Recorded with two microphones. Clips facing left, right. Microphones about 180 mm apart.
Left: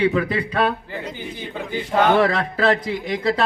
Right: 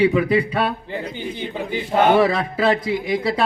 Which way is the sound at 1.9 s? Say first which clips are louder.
Right 1 dB; 10° right (ahead or behind).